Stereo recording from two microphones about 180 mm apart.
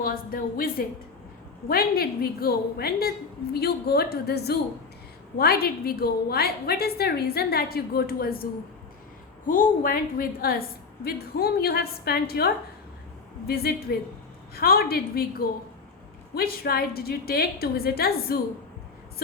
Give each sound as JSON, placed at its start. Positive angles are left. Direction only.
{"t": 0.0, "sound": "a woman's voice", "side_deg": 55}
{"t": 9.5, "sound": "a woman's voice", "side_deg": 50}
{"t": 13.5, "sound": "a woman's voice", "side_deg": 60}